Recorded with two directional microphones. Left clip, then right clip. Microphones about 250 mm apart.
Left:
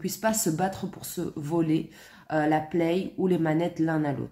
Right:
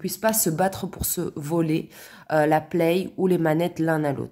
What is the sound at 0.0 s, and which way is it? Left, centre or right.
Speech, right.